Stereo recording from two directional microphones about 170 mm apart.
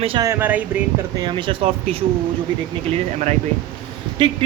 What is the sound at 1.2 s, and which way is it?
Speech, 30° right (ahead or behind).